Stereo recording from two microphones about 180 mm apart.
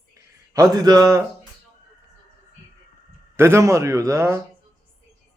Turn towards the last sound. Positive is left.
turn(degrees=-15)  # may be behind; listen again after turning